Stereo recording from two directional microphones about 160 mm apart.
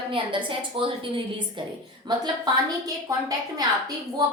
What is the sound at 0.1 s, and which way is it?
A woman's voice, 30° right (ahead or behind).